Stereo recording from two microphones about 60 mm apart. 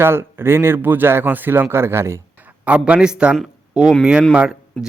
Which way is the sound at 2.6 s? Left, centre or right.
Centre.